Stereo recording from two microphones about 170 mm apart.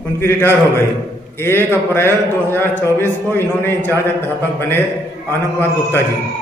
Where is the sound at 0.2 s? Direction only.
15° left (ahead or behind).